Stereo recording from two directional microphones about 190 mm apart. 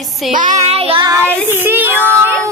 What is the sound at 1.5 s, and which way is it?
Child singing, 10° right (ahead or behind).